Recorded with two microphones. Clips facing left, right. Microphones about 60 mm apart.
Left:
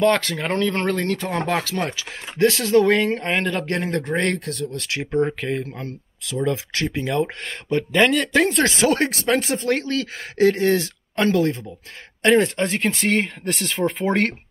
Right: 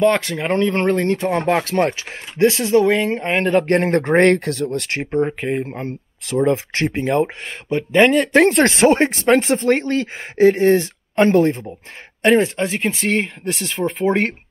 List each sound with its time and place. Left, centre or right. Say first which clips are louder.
0.0 s speech: right 2 dB; centre; by 5.0 s right
5.4 s speech: right 4 dB; right
8.3 s speech: right 5 dB; right
8.9 s speech: right 5 dB; right
12.2 s speech: right 2 dB; centre